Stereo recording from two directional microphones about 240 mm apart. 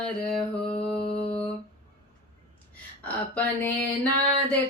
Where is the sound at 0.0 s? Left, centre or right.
Centre.